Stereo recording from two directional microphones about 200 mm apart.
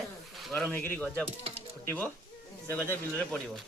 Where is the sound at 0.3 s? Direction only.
Centre (ahead or behind).